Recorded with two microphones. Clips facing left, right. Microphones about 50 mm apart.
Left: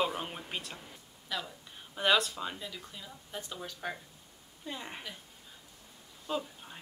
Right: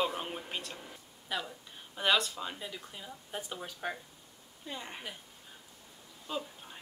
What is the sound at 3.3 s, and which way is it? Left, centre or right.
Speech, centre.